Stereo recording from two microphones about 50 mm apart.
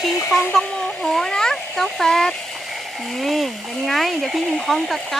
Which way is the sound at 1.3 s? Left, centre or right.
Centre.